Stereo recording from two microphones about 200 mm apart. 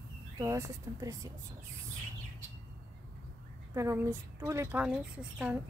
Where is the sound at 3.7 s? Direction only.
15° right (ahead or behind).